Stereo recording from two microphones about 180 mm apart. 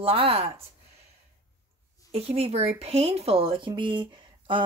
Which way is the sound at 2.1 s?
35° right (ahead or behind).